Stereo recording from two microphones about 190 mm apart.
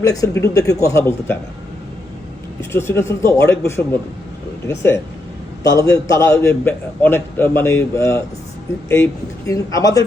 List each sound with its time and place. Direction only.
0.0 s a man's voice: 15° left (ahead or behind)
2.6 s a man's voice: 15° left (ahead or behind)
9.5 s a man's voice: 15° left (ahead or behind)